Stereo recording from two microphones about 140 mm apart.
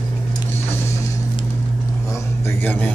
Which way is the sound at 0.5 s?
20° left (ahead or behind).